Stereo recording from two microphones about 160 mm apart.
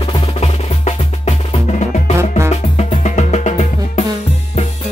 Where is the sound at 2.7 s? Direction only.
45° left (ahead or behind).